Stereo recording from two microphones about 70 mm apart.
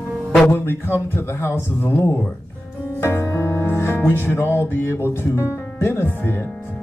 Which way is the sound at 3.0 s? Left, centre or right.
Left.